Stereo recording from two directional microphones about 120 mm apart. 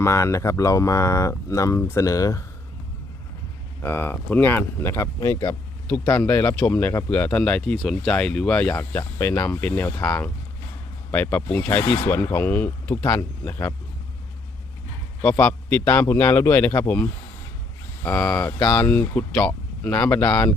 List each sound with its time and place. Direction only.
0.0 s speech: 25° left (ahead or behind)
3.8 s speech: 20° left (ahead or behind)
11.1 s speech: 15° left (ahead or behind)
15.2 s speech: 10° left (ahead or behind)